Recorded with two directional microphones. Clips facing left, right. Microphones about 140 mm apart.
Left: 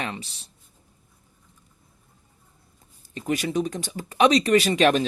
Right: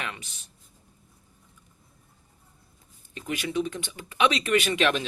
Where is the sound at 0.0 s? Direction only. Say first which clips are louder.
Left 5 dB; 35° left (ahead or behind).